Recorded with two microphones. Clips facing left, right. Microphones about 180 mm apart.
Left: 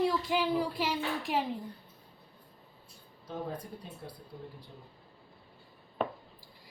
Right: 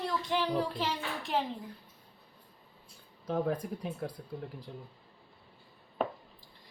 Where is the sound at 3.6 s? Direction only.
90° right.